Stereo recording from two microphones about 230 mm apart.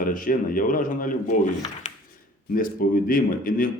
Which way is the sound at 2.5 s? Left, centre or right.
Left.